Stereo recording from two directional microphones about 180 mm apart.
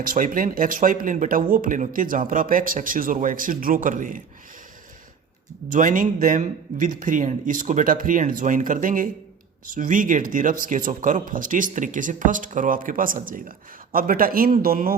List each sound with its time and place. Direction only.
0.0 s speech: 50° right (ahead or behind)
5.7 s speech: 50° right (ahead or behind)